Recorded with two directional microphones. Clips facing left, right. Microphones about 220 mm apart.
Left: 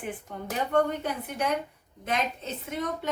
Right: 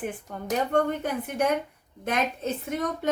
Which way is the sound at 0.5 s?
50° right (ahead or behind).